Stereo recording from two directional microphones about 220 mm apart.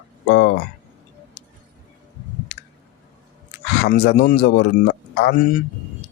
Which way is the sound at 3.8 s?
45° left (ahead or behind).